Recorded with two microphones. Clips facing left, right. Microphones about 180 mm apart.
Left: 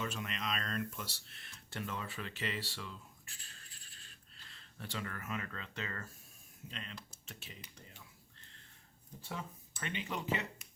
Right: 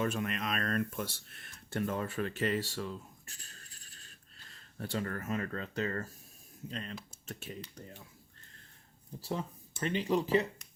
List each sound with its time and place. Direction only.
0.0 s speech: 50° right (ahead or behind)
9.8 s speech: 35° right (ahead or behind)